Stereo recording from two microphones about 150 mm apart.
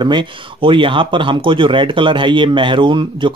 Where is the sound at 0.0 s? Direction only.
30° right (ahead or behind).